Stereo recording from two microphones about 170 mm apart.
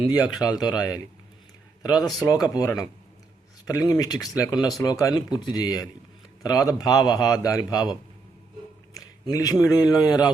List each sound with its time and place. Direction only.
0.1 s speech: 20° left (ahead or behind)
2.0 s speech: centre (ahead or behind)
2.2 s speech: 20° left (ahead or behind)
3.7 s speech: 20° left (ahead or behind)
8.9 s a man's voice: 20° left (ahead or behind)